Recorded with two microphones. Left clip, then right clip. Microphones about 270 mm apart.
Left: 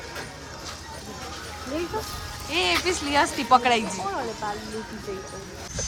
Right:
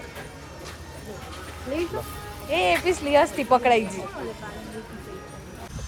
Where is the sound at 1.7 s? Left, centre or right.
Left.